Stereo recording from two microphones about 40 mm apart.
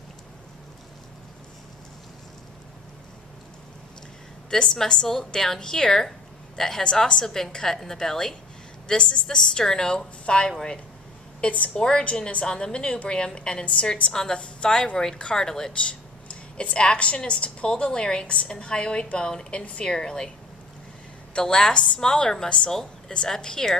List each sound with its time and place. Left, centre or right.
4.5 s a woman's voice: left
14.1 s a woman's voice: centre
16.3 s a woman's voice: left
21.4 s a woman's voice: centre